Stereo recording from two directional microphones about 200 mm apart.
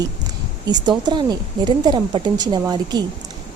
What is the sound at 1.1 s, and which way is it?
A woman's voice, 20° right (ahead or behind).